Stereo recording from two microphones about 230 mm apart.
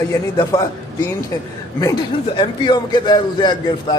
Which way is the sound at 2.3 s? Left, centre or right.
Left.